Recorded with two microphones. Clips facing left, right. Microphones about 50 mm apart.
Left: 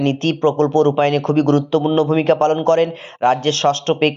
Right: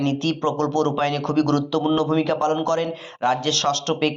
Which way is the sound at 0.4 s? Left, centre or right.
Left.